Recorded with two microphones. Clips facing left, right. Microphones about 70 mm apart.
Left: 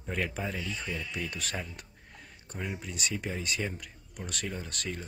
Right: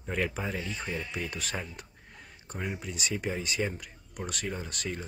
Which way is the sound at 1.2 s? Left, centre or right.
Centre.